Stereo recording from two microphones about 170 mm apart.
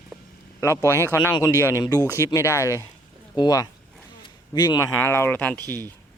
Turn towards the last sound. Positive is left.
turn(degrees=10)  # may be behind; listen again after turning